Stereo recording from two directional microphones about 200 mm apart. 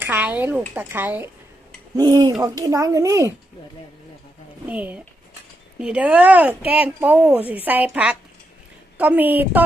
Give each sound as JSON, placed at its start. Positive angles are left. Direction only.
{"t": 0.0, "sound": "a woman's voice", "side_deg": -10}
{"t": 2.0, "sound": "a woman's voice", "side_deg": -20}
{"t": 4.7, "sound": "a woman's voice", "side_deg": -5}